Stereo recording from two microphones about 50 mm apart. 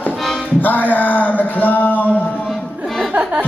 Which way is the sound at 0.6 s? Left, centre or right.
Left.